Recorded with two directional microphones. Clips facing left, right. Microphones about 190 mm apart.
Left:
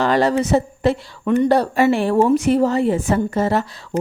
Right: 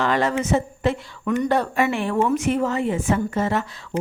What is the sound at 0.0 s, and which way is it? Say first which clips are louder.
A woman's voice: left 5 dB; 35° left (ahead or behind).